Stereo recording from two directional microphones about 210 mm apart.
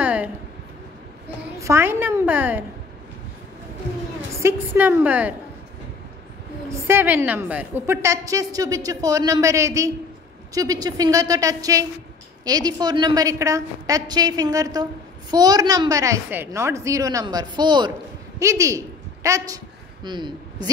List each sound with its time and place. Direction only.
0.0 s a sound: 5° right (ahead or behind)
1.6 s a woman's voice: 10° right (ahead or behind)
4.3 s a woman's voice: 10° right (ahead or behind)
6.7 s a woman's voice: 10° right (ahead or behind)